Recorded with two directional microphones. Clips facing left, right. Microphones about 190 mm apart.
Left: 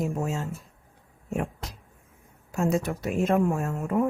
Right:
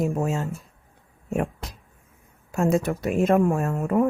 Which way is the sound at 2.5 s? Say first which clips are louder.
Right 4 dB; 55° right (ahead or behind).